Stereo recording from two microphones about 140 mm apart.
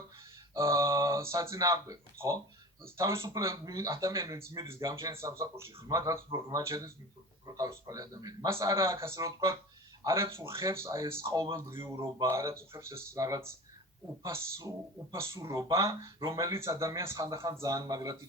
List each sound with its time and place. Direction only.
0.5 s speech: 20° right (ahead or behind)